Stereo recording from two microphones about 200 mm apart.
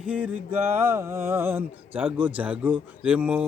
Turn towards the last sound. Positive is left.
turn(degrees=-5)  # may be behind; listen again after turning